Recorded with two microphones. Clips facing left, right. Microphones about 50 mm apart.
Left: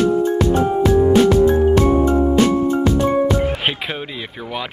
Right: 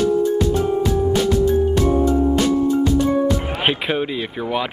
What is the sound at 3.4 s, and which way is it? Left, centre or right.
Music, centre.